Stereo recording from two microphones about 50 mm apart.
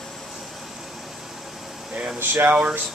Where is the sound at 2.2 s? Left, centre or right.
Right.